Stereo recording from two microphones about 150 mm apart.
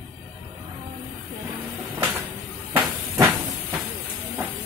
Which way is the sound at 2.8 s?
20° right (ahead or behind).